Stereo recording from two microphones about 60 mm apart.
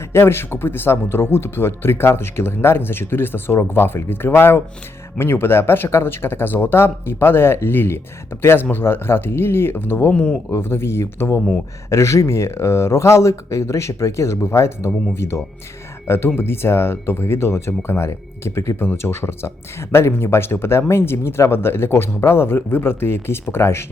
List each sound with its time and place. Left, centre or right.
0.1 s speech: left
10.6 s speech: left
18.8 s speech: left